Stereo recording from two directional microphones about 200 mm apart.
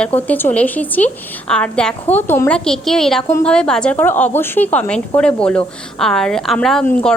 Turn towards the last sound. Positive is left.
turn(degrees=5)  # may be behind; listen again after turning